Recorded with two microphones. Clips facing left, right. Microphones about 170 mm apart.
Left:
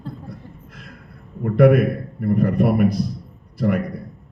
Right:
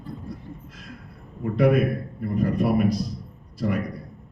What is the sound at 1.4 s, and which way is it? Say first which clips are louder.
A man's voice: left 5 dB; 55° left (ahead or behind).